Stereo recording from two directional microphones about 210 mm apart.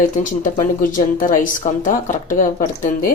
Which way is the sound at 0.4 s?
40° left (ahead or behind).